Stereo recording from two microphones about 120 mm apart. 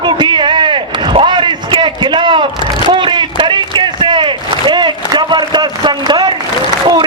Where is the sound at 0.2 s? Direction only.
40° right (ahead or behind).